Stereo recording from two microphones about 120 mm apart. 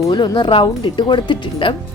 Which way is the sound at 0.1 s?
40° left (ahead or behind).